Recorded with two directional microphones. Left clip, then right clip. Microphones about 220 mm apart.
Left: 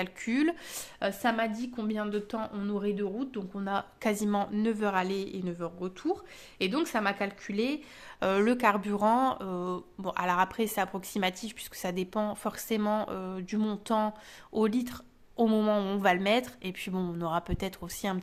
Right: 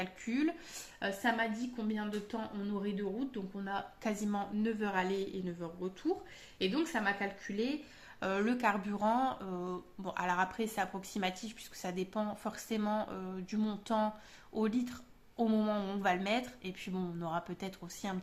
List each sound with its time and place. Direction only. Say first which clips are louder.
0.0 s a woman's voice: left 6 dB; 40° left (ahead or behind)